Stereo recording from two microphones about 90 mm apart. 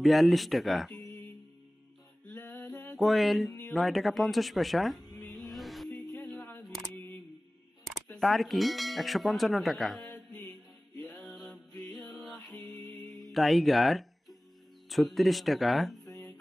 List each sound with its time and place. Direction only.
0.0 s speech: centre (ahead or behind)
2.2 s music: 20° left (ahead or behind)
3.0 s speech: centre (ahead or behind)
5.1 s music: centre (ahead or behind)
6.3 s single-lens reflex camera: 20° left (ahead or behind)
7.8 s speech: centre (ahead or behind)
10.1 s music: 15° left (ahead or behind)
13.1 s speech: centre (ahead or behind)